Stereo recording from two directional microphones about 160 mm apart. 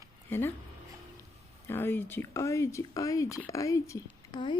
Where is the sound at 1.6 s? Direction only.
15° left (ahead or behind).